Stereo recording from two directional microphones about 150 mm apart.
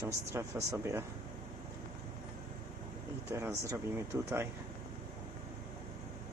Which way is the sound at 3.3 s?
20° right (ahead or behind).